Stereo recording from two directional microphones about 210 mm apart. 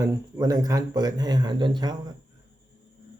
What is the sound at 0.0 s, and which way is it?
A man's voice, 15° right (ahead or behind).